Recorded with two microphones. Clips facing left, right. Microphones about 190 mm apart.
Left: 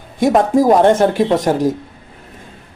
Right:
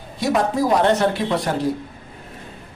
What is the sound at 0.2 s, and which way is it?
Speech, 50° left (ahead or behind).